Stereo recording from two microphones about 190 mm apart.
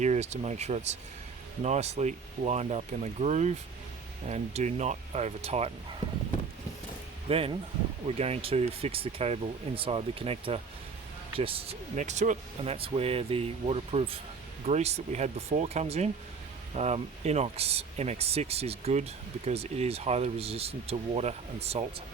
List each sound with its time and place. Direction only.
0.0 s speech: 35° right (ahead or behind)
7.3 s speech: 30° right (ahead or behind)